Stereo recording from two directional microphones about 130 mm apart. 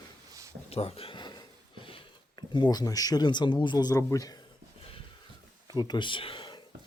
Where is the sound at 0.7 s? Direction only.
50° left (ahead or behind).